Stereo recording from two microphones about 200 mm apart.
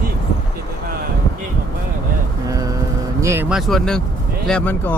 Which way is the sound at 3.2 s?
15° right (ahead or behind).